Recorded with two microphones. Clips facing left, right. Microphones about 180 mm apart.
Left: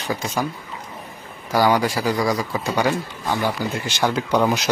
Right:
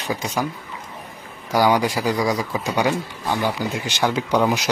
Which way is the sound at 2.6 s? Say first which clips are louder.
Even; 15° right (ahead or behind).